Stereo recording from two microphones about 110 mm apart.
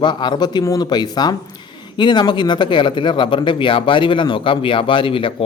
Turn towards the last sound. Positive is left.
turn(degrees=55)  # may be behind; listen again after turning